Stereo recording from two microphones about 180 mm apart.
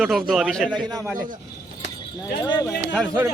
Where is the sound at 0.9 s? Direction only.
20° right (ahead or behind).